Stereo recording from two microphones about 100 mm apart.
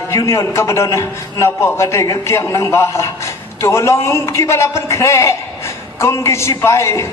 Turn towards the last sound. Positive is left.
turn(degrees=30)  # may be behind; listen again after turning